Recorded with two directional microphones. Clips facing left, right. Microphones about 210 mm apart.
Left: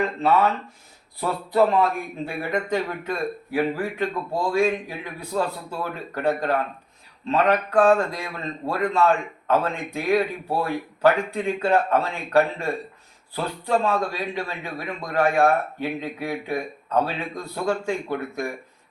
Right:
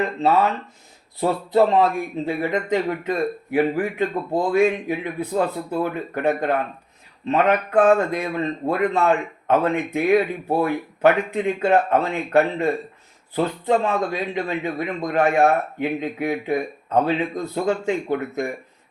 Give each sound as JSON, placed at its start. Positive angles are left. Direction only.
{"t": 1.2, "sound": "a man's voice", "side_deg": -25}